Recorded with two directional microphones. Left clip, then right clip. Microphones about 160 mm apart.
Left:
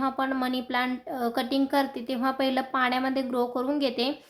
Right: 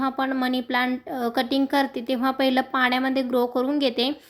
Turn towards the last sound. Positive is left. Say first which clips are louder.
# right 4 dB
turn(degrees=-25)  # may be behind; listen again after turning